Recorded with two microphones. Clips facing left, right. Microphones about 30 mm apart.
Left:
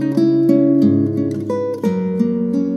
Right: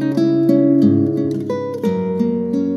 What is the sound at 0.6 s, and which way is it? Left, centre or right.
Music, centre.